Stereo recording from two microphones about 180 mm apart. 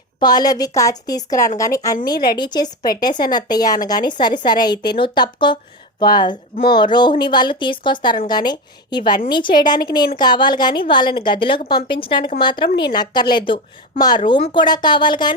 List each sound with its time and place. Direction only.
0.2 s a woman's voice: 20° left (ahead or behind)